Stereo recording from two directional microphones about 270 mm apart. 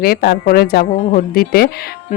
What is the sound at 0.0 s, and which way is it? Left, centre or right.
Speech, left.